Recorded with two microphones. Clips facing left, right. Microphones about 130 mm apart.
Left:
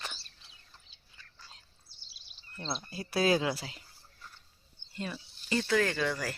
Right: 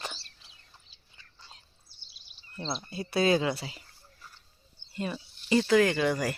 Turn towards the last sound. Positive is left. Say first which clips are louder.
# right 5 dB
turn(degrees=-15)  # may be behind; listen again after turning